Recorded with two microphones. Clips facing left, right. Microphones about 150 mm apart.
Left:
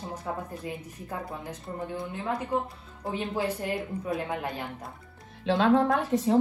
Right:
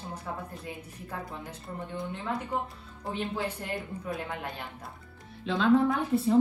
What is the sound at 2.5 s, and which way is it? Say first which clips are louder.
Speech: left 5 dB; 10° left (ahead or behind).